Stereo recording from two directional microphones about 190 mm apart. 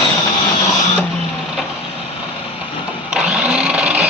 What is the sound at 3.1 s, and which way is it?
Sewing machine, 5° right (ahead or behind).